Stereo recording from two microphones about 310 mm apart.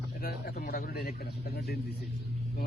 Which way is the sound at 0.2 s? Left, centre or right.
Left.